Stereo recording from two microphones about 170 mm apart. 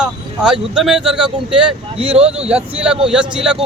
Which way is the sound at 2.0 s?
35° right (ahead or behind).